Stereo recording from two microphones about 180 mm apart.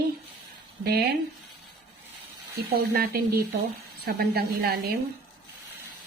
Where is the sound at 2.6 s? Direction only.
60° right (ahead or behind).